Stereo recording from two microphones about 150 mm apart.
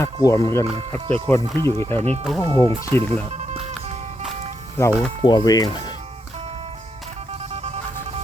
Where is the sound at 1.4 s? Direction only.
30° right (ahead or behind).